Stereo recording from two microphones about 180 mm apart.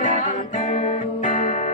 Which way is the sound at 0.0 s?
45° left (ahead or behind).